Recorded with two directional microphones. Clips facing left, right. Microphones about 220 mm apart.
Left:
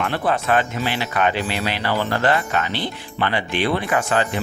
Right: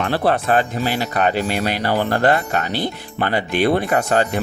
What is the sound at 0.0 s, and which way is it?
Speech, 35° right (ahead or behind).